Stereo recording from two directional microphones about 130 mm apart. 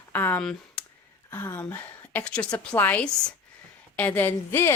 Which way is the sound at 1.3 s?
20° left (ahead or behind).